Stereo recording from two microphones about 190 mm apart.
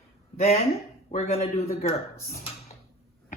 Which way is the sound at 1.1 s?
35° left (ahead or behind).